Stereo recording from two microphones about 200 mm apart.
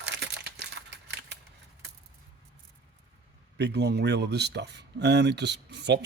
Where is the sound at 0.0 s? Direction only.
60° right (ahead or behind).